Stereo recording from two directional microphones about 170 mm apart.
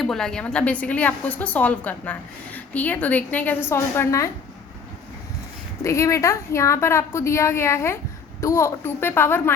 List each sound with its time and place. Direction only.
0.0 s a woman's voice: centre (ahead or behind)
5.8 s a woman's voice: 20° left (ahead or behind)